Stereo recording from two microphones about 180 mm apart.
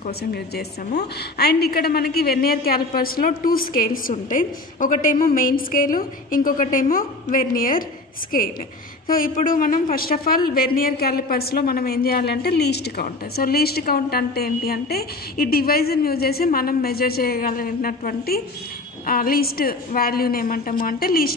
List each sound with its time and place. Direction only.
0.2 s a woman's voice: 60° left (ahead or behind)
9.0 s a woman's voice: 50° left (ahead or behind)